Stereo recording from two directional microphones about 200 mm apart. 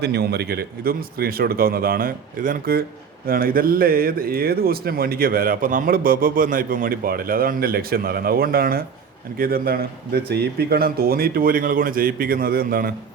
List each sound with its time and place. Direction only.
0.0 s speech: 55° right (ahead or behind)